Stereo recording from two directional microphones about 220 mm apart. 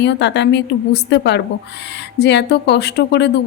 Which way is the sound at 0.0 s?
50° left (ahead or behind).